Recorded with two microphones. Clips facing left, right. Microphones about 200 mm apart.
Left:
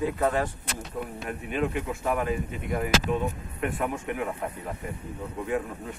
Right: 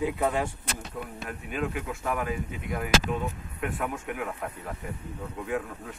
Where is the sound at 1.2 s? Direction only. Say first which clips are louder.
Left 3 dB; centre (ahead or behind).